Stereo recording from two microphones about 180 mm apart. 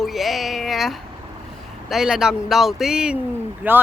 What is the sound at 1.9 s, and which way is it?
Speech, centre (ahead or behind).